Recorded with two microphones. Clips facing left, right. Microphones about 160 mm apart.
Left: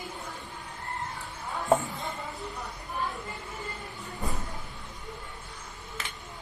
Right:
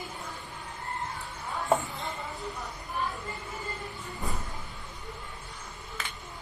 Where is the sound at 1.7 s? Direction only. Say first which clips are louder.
Left 3 dB; centre (ahead or behind).